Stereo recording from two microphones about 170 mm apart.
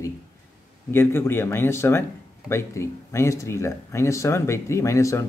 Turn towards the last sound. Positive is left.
turn(degrees=20)  # may be behind; listen again after turning